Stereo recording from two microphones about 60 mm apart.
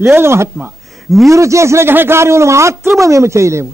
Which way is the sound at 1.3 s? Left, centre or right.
Right.